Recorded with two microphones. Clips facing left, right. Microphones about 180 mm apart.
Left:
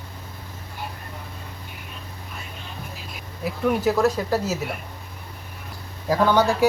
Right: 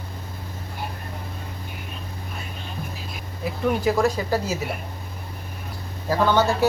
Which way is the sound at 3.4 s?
5° left (ahead or behind).